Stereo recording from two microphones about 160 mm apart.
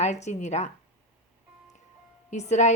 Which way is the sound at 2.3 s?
45° left (ahead or behind).